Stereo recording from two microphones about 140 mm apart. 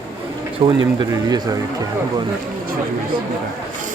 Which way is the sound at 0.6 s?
30° right (ahead or behind).